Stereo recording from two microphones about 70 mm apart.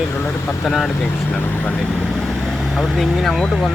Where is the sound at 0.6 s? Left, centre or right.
Centre.